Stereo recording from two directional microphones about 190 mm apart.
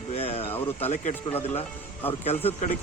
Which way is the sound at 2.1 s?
30° left (ahead or behind).